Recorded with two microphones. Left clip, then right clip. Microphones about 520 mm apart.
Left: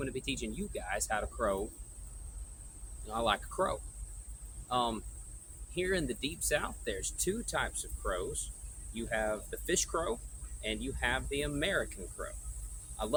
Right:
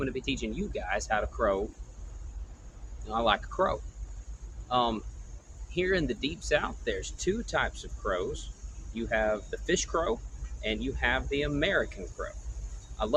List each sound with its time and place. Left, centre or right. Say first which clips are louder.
0.0 s speech: right 5 dB; left
3.1 s speech: right 5 dB; left